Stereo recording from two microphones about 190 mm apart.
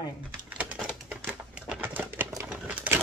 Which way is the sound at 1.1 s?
5° right (ahead or behind).